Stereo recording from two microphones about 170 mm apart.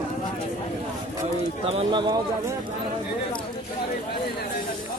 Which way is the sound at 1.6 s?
35° right (ahead or behind).